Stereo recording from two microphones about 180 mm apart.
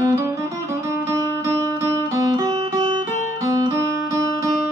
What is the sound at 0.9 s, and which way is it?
Music, 15° right (ahead or behind).